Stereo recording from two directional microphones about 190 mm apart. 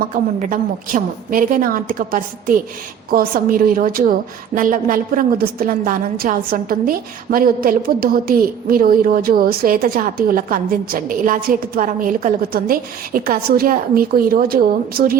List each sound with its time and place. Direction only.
0.5 s a woman's voice: 45° right (ahead or behind)